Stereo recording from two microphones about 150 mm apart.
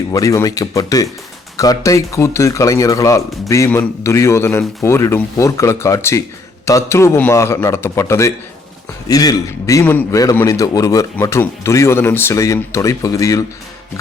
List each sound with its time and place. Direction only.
0.1 s a man's voice: 20° left (ahead or behind)